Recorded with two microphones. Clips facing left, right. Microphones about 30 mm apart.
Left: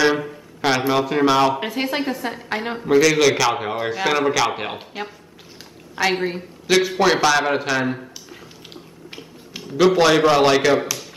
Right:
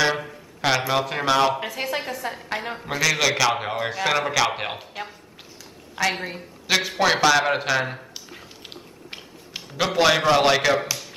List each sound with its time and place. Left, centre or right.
0.0 s speech: centre
1.6 s a woman's voice: centre
2.8 s a man's voice: centre
5.9 s a woman's voice: centre
6.7 s a man's voice: centre
8.4 s dog: centre
9.6 s a man's voice: centre